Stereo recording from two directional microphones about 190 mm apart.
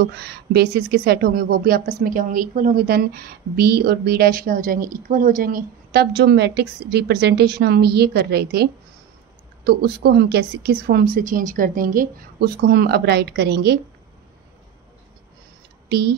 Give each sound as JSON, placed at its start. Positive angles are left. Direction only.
{"t": 0.0, "sound": "speech", "side_deg": -60}
{"t": 9.7, "sound": "speech", "side_deg": -55}
{"t": 15.9, "sound": "speech", "side_deg": -55}